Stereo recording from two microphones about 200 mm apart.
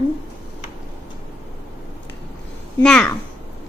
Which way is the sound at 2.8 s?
5° left (ahead or behind).